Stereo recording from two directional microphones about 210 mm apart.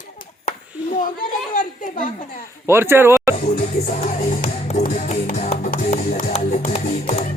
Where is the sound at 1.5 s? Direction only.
40° left (ahead or behind).